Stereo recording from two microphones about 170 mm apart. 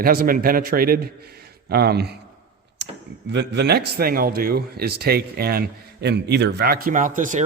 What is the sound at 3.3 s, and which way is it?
A man's voice, 75° right (ahead or behind).